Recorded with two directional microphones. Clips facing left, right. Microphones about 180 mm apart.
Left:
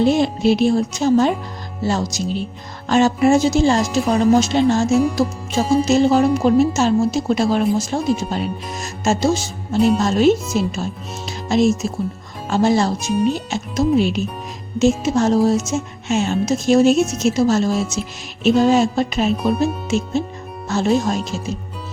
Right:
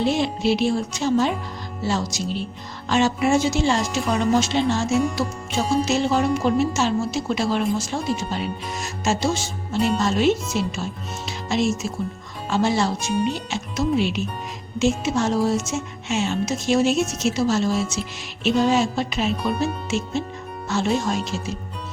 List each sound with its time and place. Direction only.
0.0 s a woman's voice: 45° left (ahead or behind)
4.9 s music: 5° left (ahead or behind)
5.8 s a woman's voice: 40° left (ahead or behind)
13.1 s music: centre (ahead or behind)
13.3 s a woman's voice: 40° left (ahead or behind)
20.7 s a woman's voice: 40° left (ahead or behind)